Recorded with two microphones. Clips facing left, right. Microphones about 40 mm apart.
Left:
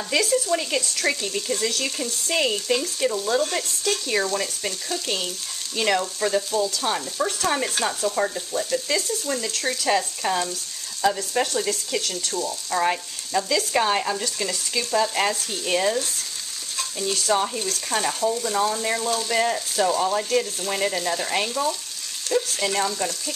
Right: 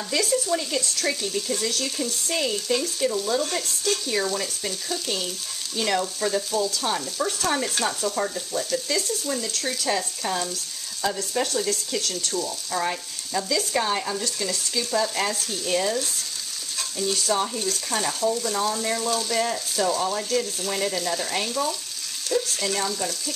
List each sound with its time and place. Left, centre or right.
0.2 s speech: centre
0.6 s speech: left
0.9 s speech: centre
12.2 s speech: centre
12.7 s speech: centre
14.2 s speech: centre
16.7 s stir: centre
17.3 s speech: centre